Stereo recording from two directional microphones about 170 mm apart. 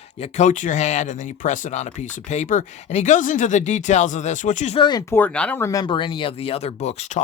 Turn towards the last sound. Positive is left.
turn(degrees=40)  # may be behind; listen again after turning